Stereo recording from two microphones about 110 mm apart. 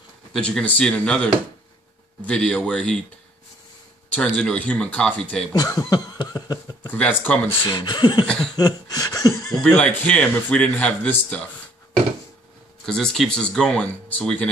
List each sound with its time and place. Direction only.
0.3 s speech: 5° left (ahead or behind)
4.4 s speech: 10° left (ahead or behind)
5.5 s speech: 35° left (ahead or behind)
6.9 s speech: 15° left (ahead or behind)
7.6 s speech: 40° left (ahead or behind)
8.5 s laughter: 35° left (ahead or behind)
9.6 s speech: 10° left (ahead or behind)
12.8 s speech: 5° left (ahead or behind)